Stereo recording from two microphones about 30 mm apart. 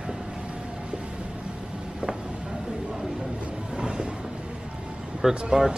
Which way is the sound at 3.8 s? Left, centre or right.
Right.